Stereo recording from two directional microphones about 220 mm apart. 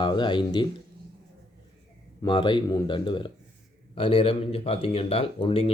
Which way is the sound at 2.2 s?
20° left (ahead or behind).